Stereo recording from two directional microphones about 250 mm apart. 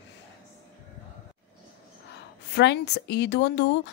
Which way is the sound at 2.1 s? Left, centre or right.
Left.